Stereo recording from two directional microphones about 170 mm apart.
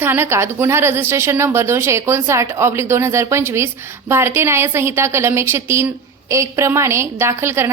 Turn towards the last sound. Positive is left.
turn(degrees=-15)  # may be behind; listen again after turning